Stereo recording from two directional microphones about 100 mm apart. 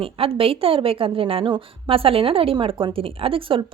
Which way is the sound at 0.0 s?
65° right (ahead or behind).